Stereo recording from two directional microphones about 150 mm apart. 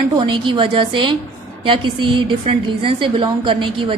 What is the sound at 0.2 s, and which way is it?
A woman's voice, 35° right (ahead or behind).